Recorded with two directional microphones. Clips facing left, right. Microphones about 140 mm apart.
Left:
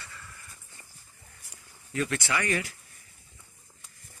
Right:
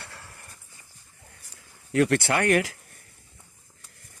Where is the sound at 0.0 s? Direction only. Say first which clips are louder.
Right 3 dB; 75° right (ahead or behind).